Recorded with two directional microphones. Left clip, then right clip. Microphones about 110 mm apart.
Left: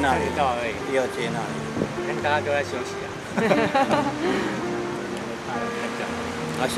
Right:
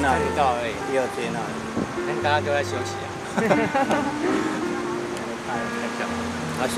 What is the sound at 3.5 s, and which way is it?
Speech, 20° left (ahead or behind).